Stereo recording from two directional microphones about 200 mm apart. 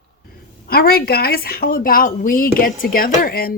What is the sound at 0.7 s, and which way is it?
Dishes, 50° left (ahead or behind).